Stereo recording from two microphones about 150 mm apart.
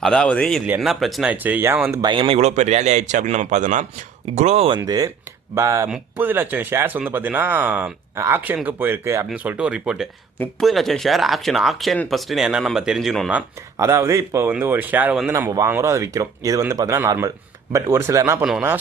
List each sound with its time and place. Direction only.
0.0 s speech: 5° left (ahead or behind)
1.3 s speech: 10° right (ahead or behind)
2.0 s a man's voice: 35° right (ahead or behind)
4.8 s speech: 25° right (ahead or behind); by 13.4 s 5° right (ahead or behind)
13.7 s speech: 20° right (ahead or behind)
15.3 s speech: 20° right (ahead or behind)